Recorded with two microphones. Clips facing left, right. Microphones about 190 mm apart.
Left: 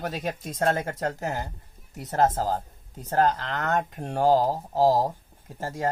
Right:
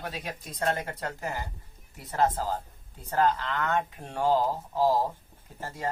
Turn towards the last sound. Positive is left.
turn(degrees=45)  # may be behind; listen again after turning